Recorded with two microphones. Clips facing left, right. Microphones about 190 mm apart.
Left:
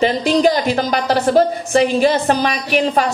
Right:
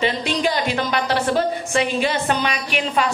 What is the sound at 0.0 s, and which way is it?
A woman's voice, 40° left (ahead or behind).